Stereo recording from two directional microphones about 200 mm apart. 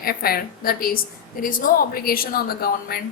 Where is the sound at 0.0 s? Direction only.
50° left (ahead or behind).